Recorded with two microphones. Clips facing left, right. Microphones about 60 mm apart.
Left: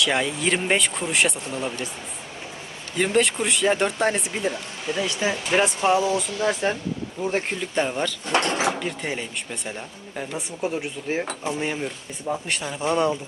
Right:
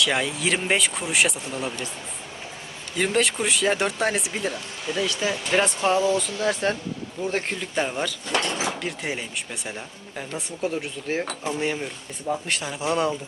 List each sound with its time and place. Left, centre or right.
0.0 s speech: centre
3.0 s speech: centre
5.0 s speech: left
5.4 s speech: centre
7.8 s speech: centre
8.3 s a sound: left
8.8 s speech: centre